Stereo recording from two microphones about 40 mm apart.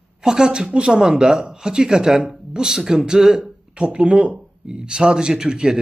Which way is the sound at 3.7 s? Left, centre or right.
Right.